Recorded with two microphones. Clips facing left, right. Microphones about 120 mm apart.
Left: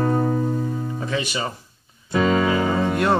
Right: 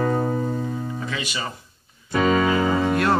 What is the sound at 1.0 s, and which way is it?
Speech, 30° left (ahead or behind).